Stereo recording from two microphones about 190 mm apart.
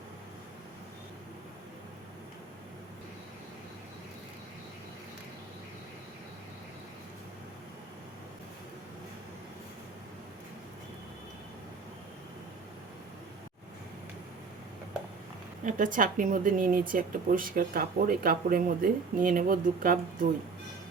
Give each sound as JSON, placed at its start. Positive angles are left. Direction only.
{"t": 15.6, "sound": "a woman's voice", "side_deg": -45}